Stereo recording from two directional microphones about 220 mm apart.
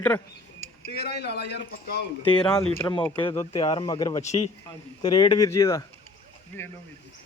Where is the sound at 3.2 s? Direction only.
15° left (ahead or behind).